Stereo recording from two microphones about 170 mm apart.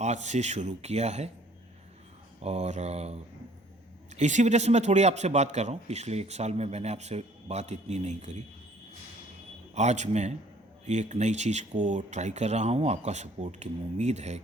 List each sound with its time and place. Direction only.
0.0 s speech: 40° right (ahead or behind)
2.4 s speech: 40° right (ahead or behind)
4.2 s speech: 45° right (ahead or behind)
9.7 s speech: 40° right (ahead or behind)